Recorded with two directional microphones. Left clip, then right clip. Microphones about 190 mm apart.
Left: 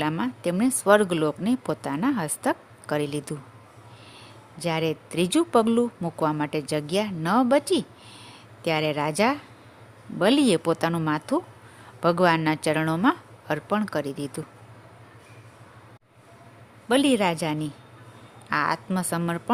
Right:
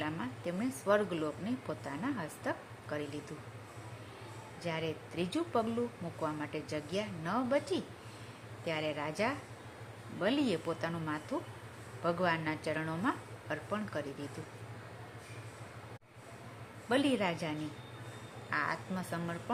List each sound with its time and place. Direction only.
0.0 s speech: 60° left (ahead or behind)
4.6 s speech: 65° left (ahead or behind)
16.9 s speech: 60° left (ahead or behind)